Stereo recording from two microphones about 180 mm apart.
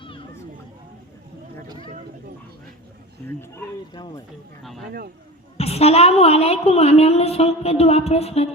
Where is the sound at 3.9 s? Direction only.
25° left (ahead or behind).